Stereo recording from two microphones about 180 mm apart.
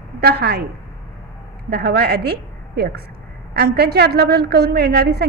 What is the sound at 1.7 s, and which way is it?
A woman's voice, 60° right (ahead or behind).